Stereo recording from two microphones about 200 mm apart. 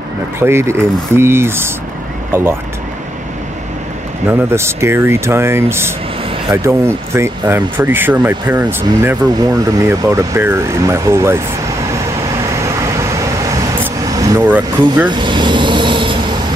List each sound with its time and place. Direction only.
0.4 s speech: 10° right (ahead or behind)
4.3 s speech: 10° right (ahead or behind)
12.6 s vehicle: 15° right (ahead or behind)
15.0 s vehicle: 25° right (ahead or behind)